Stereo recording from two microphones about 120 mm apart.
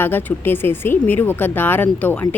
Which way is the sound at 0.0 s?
15° left (ahead or behind).